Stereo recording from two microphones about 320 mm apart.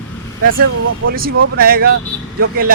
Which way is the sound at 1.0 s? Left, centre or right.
Right.